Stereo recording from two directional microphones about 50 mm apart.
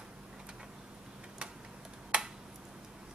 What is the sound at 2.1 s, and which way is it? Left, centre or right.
Finger snapping, right.